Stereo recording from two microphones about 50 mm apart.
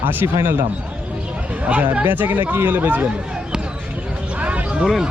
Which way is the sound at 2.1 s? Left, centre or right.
Right.